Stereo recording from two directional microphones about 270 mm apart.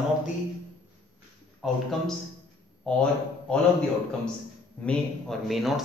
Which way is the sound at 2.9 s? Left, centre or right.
Centre.